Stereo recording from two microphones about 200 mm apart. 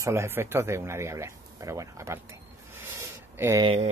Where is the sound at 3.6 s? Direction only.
30° right (ahead or behind).